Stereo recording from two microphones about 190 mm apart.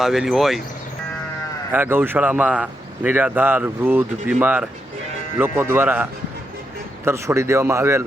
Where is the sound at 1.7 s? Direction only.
10° right (ahead or behind).